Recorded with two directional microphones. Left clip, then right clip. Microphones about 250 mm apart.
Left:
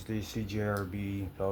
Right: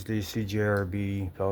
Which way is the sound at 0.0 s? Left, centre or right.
Right.